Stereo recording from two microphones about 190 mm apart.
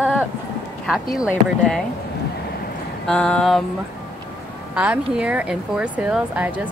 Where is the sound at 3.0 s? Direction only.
5° left (ahead or behind).